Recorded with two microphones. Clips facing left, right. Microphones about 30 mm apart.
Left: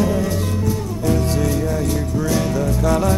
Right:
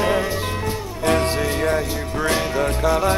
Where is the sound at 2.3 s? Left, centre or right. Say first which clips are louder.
Left 2 dB; right.